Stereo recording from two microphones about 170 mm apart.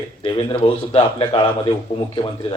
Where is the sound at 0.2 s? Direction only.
30° left (ahead or behind).